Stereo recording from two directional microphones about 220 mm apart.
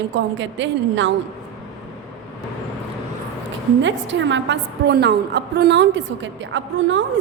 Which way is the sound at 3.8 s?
55° right (ahead or behind).